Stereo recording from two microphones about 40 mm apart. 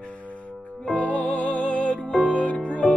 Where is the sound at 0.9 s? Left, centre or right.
Left.